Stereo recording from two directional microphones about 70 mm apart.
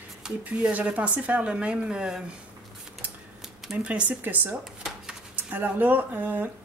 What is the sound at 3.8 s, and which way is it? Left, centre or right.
Speech, centre.